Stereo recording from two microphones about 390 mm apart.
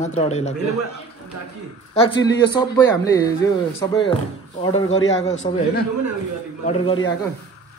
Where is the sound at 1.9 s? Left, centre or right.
Centre.